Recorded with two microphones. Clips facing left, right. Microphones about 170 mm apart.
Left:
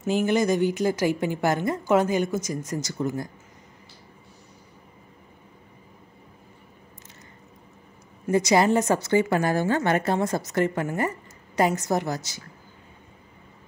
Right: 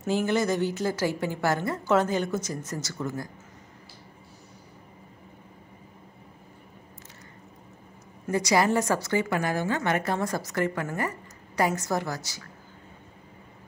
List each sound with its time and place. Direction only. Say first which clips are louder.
0.0 s a woman's voice: left 3 dB; 15° left (ahead or behind)
8.3 s a woman's voice: left 4 dB; 25° left (ahead or behind)